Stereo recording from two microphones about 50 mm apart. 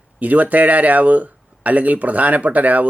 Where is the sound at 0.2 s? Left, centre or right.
Right.